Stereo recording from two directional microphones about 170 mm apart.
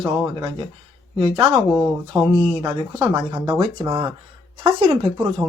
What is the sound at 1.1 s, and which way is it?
Speech, 30° right (ahead or behind).